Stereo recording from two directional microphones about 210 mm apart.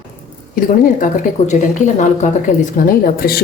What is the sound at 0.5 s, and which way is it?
Speech, 40° left (ahead or behind).